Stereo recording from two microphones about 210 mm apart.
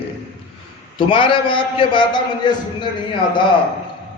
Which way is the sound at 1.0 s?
25° left (ahead or behind).